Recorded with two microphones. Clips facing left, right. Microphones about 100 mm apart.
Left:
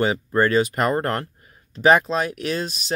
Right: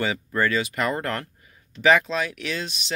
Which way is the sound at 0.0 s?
40° left (ahead or behind).